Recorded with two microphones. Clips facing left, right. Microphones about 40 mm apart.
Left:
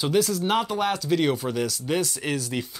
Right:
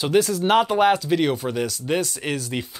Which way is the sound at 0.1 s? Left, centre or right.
Right.